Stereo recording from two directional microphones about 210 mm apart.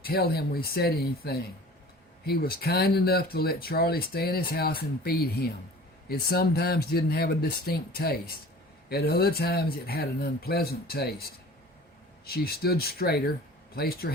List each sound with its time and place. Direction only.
0.0 s speech: 45° left (ahead or behind)
12.3 s speech: 45° left (ahead or behind)